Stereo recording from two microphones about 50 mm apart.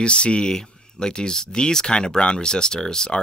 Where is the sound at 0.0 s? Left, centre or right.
Left.